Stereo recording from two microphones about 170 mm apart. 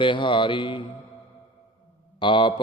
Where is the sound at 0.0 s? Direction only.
30° left (ahead or behind).